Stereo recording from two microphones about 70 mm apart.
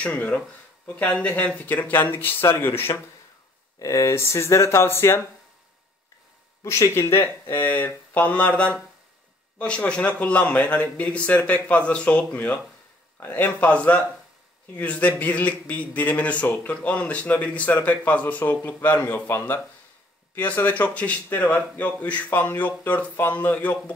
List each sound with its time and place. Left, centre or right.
0.0 s a man's voice: centre
3.8 s speech: left
4.1 s speech: left
6.6 s speech: left
7.4 s a man's voice: left